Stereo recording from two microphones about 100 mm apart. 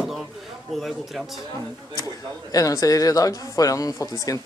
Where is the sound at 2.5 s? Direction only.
35° left (ahead or behind).